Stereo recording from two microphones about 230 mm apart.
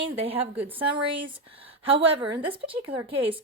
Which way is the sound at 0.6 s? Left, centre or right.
Centre.